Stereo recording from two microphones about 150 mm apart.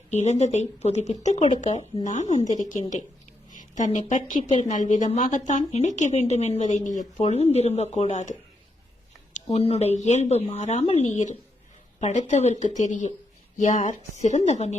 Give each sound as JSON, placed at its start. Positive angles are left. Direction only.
{"t": 0.1, "sound": "a woman's voice", "side_deg": 50}